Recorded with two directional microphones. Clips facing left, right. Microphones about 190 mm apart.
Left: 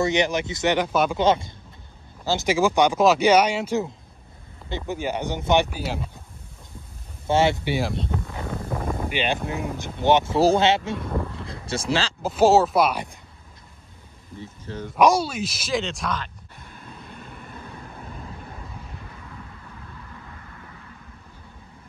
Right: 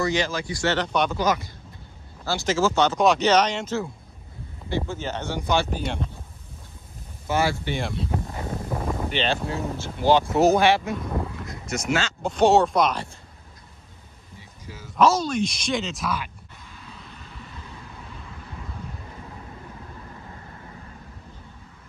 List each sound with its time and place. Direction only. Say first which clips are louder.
0.0 s speech: left 3 dB; 20° left (ahead or behind)
2.2 s speech: left 2 dB; 15° left (ahead or behind)
5.7 s speech: right 1 dB; 5° left (ahead or behind)
7.2 s speech: left 4 dB; 25° left (ahead or behind)
7.6 s speech: left 3 dB; 5° left (ahead or behind)
8.6 s a sound: even; 5° right (ahead or behind)
8.9 s boat: even; 10° left (ahead or behind)
9.5 s speech: even; 15° left (ahead or behind)
11.3 s a sound: left 1 dB; 30° left (ahead or behind)
12.2 s speech: left 1 dB; 5° left (ahead or behind)
14.4 s a sound: left 9 dB; 5° right (ahead or behind)
15.0 s speech: left 1 dB; 10° left (ahead or behind); by 16.3 s 5° right (ahead or behind)
16.6 s vehicle: left 3 dB; 50° left (ahead or behind)
20.4 s vehicle: right 2 dB; 30° right (ahead or behind)